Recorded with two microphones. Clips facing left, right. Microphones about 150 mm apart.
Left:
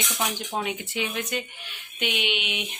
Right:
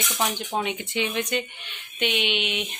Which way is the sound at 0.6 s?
5° left (ahead or behind).